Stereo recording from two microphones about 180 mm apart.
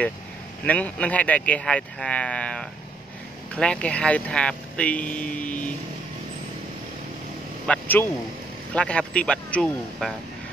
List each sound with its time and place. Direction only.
0.7 s speech: 10° left (ahead or behind)
7.6 s speech: 10° left (ahead or behind)